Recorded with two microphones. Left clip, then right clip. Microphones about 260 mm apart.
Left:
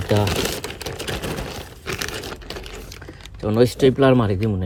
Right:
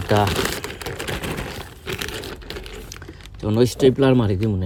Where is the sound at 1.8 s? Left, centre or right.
Centre.